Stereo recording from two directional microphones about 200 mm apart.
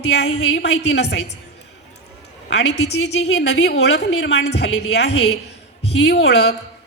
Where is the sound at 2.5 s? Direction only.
60° left (ahead or behind).